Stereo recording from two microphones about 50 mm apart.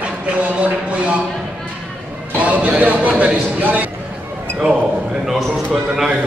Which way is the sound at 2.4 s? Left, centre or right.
Right.